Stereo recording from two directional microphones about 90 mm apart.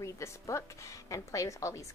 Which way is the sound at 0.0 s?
35° left (ahead or behind).